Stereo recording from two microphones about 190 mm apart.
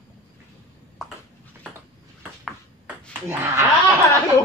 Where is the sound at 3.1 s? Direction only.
10° right (ahead or behind).